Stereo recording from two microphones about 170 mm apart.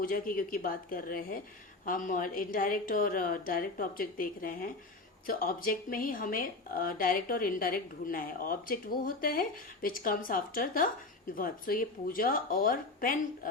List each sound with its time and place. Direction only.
0.0 s speech: 55° left (ahead or behind)